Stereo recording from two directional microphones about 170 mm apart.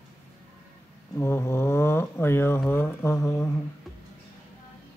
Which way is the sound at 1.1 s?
15° left (ahead or behind).